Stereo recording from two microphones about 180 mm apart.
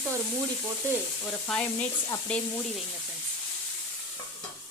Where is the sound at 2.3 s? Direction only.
5° left (ahead or behind).